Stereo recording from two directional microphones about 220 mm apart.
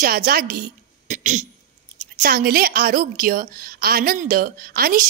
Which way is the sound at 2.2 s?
45° right (ahead or behind).